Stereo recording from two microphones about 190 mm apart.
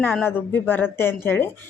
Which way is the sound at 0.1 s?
10° left (ahead or behind).